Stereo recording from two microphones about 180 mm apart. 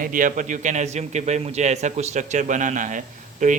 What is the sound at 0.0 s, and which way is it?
A man's voice, 50° right (ahead or behind).